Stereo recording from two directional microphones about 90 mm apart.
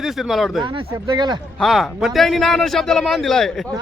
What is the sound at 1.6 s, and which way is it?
Speech, centre (ahead or behind).